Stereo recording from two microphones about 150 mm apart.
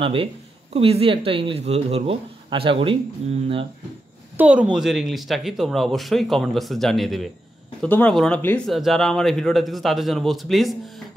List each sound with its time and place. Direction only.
0.0 s speech: 35° right (ahead or behind)
4.4 s speech: 10° right (ahead or behind)